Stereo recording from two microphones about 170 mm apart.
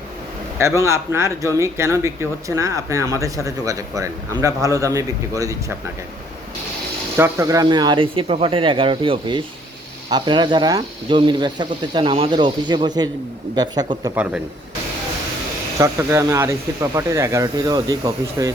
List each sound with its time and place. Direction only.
0.6 s speech: 15° right (ahead or behind)
7.2 s speech: 20° right (ahead or behind)
15.8 s speech: 15° right (ahead or behind)